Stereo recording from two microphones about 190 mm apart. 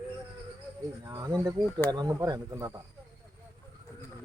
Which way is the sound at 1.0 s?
20° right (ahead or behind).